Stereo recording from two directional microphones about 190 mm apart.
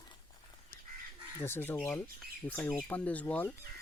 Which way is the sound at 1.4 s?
10° left (ahead or behind).